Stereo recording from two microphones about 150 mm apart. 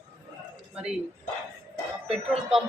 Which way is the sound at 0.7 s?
5° right (ahead or behind).